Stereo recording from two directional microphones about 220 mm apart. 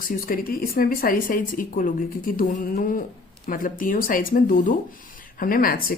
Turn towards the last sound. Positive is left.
turn(degrees=40)  # may be behind; listen again after turning